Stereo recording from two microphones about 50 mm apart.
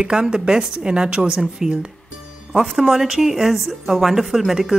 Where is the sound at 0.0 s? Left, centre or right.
Centre.